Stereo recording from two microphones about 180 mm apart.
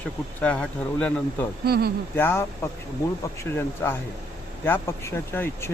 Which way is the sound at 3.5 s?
10° left (ahead or behind).